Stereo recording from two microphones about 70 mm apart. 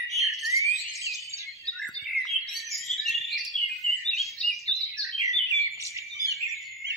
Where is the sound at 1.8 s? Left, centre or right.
Centre.